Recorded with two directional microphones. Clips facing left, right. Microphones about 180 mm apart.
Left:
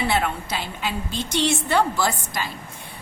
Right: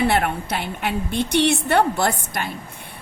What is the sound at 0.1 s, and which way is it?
A woman's voice, 60° right (ahead or behind).